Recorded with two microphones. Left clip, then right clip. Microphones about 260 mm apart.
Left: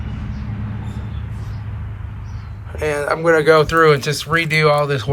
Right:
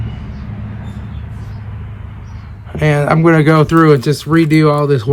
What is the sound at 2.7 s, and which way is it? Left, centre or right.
Speech, right.